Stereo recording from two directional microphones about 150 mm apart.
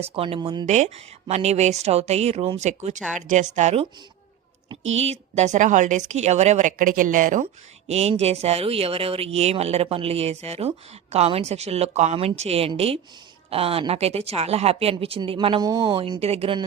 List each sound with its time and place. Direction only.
0.0 s a woman's voice: 40° right (ahead or behind)
0.6 s speech: 50° right (ahead or behind)
4.9 s speech: 45° right (ahead or behind)
7.4 s a woman's voice: 45° right (ahead or behind)